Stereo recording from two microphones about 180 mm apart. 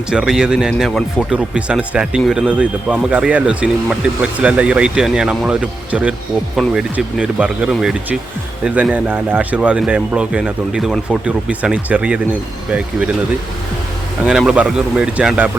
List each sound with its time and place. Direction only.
0.1 s speech: 5° right (ahead or behind)
14.3 s speech: 5° right (ahead or behind)